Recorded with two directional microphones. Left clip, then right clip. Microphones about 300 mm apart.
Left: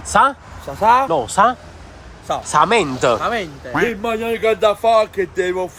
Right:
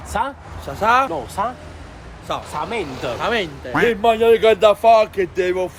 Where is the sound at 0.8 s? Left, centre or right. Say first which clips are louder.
Left 2 dB; centre.